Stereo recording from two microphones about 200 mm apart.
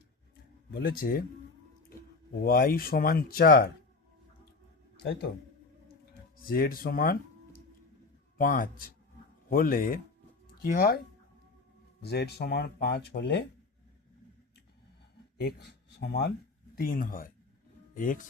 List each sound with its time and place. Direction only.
0.7 s speech: 50° left (ahead or behind)
2.4 s speech: 50° left (ahead or behind)
6.5 s speech: 45° left (ahead or behind)
12.0 s speech: 55° left (ahead or behind)
15.4 s speech: 55° left (ahead or behind)